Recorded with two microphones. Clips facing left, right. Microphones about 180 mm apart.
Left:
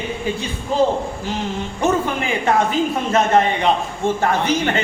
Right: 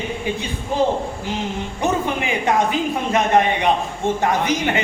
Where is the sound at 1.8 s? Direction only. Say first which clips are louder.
Left 2 dB; 15° right (ahead or behind).